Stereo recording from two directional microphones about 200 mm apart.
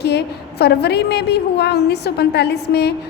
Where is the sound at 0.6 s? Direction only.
55° left (ahead or behind).